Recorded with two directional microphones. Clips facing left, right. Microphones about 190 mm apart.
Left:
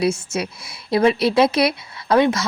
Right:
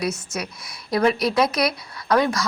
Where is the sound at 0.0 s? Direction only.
30° left (ahead or behind).